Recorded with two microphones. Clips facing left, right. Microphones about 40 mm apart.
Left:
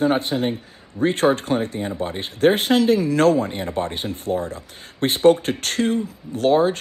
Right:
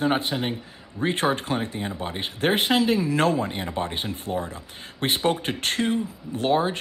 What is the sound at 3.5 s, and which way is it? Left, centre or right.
Speech, centre.